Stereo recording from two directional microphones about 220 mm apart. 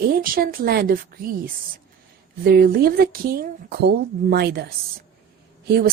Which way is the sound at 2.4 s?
45° right (ahead or behind).